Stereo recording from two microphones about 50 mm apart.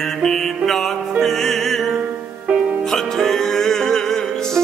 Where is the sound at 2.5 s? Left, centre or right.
Right.